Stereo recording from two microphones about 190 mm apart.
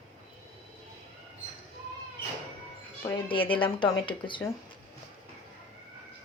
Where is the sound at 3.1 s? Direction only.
25° left (ahead or behind).